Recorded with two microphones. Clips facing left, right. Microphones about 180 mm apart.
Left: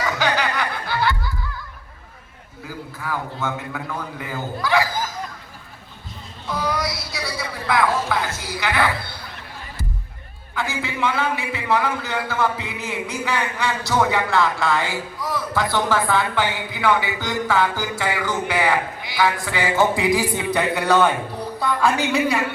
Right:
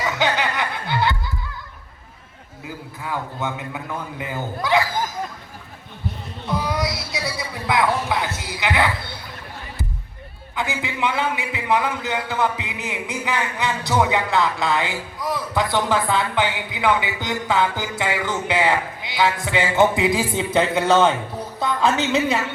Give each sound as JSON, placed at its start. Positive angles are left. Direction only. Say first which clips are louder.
{"t": 0.0, "sound": "music", "louder": "even", "side_deg": -20}
{"t": 2.6, "sound": "a man's voice", "louder": "left 1 dB", "side_deg": -20}
{"t": 6.5, "sound": "a sound", "louder": "right 1 dB", "side_deg": -20}
{"t": 10.5, "sound": "a man's voice", "louder": "even", "side_deg": -15}